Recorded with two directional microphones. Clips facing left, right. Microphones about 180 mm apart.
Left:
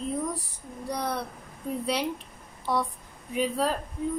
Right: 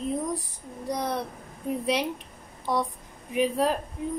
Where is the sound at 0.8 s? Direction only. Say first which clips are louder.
Right 2 dB; 20° right (ahead or behind).